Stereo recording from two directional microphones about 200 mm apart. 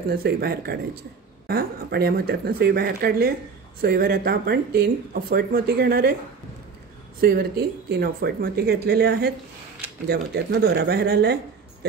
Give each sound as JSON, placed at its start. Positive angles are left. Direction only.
{"t": 0.1, "sound": "speech", "side_deg": -50}
{"t": 7.2, "sound": "speech", "side_deg": -50}